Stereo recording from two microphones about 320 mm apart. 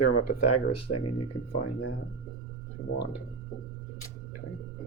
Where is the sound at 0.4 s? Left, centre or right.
Left.